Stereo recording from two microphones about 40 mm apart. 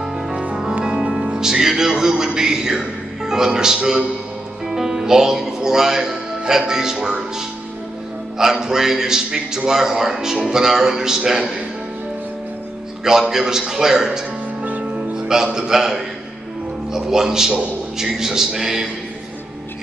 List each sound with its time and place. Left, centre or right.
0.8 s music: right
1.1 s speech: centre
13.3 s speech: centre
14.6 s music: right
15.0 s speech: centre
17.1 s speech: centre